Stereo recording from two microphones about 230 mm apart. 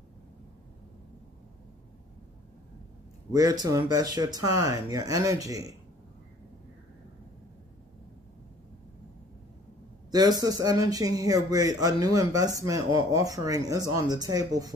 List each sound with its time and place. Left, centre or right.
3.3 s speech: centre
10.1 s speech: centre